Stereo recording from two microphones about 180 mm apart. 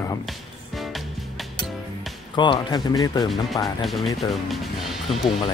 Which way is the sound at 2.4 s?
25° left (ahead or behind).